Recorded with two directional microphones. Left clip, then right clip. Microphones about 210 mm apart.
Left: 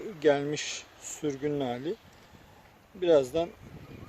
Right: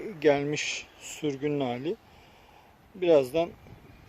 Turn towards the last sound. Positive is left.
turn(degrees=-15)  # may be behind; listen again after turning